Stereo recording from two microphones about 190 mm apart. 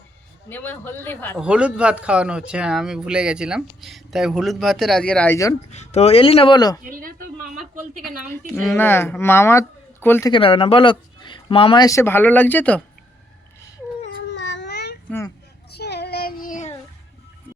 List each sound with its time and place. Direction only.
0.4 s speech: 10° left (ahead or behind)
1.4 s speech: 5° right (ahead or behind); by 5.5 s 15° left (ahead or behind)
5.7 s speech: 35° left (ahead or behind)
6.8 s speech: 45° right (ahead or behind)
8.7 s speech: 10° left (ahead or behind)
10.3 s speech: 30° left (ahead or behind); by 12.8 s 10° left (ahead or behind)
14.3 s baby cry: 70° left (ahead or behind)
15.7 s child singing: 60° left (ahead or behind); by 16.7 s 40° left (ahead or behind)